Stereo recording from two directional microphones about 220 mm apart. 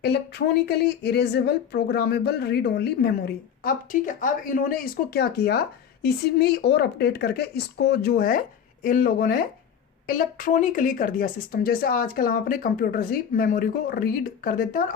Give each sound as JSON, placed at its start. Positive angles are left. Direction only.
{"t": 0.0, "sound": "speech", "side_deg": 50}
{"t": 3.6, "sound": "speech", "side_deg": 40}